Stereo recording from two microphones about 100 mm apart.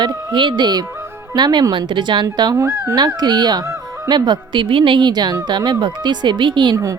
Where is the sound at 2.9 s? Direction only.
45° right (ahead or behind).